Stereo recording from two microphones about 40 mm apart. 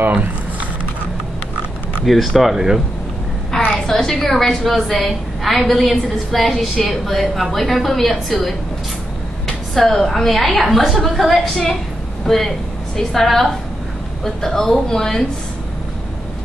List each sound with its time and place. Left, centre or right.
0.0 s speech: right
2.0 s a woman's voice: centre
3.8 s a woman's voice: centre